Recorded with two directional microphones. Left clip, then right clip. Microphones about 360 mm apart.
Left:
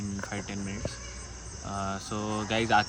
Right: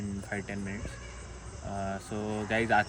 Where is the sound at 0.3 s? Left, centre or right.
Centre.